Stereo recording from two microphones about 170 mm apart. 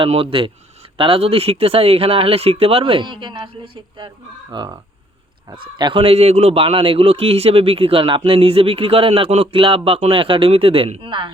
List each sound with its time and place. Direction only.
0.0 s a man's voice: 35° right (ahead or behind)